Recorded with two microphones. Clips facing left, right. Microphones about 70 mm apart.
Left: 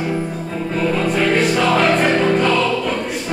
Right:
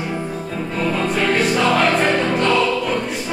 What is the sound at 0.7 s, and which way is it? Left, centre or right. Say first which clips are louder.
Music: left 2 dB; centre.